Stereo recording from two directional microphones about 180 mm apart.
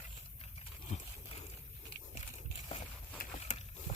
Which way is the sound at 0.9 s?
35° left (ahead or behind).